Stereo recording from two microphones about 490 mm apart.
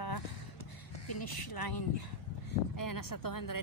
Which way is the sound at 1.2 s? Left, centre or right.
Left.